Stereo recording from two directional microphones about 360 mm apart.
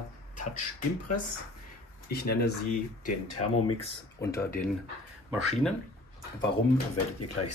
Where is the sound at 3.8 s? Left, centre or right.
Centre.